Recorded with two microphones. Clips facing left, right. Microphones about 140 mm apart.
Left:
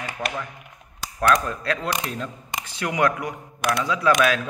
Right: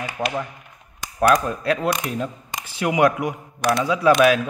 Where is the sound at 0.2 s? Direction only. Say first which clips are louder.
Right 4 dB; 25° right (ahead or behind).